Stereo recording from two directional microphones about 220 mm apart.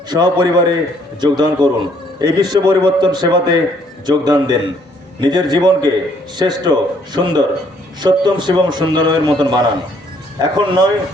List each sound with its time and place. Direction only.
0.1 s a man's voice: 20° right (ahead or behind)